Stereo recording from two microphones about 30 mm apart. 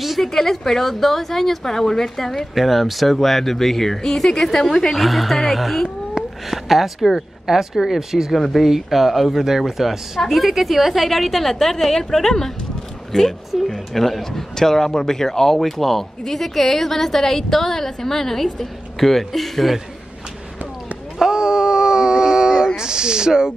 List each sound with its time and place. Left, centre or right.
0.2 s a woman's voice: centre
2.5 s a woman's voice: centre
4.9 s speech: centre
6.2 s a sound: right
6.5 s speech: centre
7.4 s a woman's voice: centre
21.2 s a sound: right
22.8 s speech: right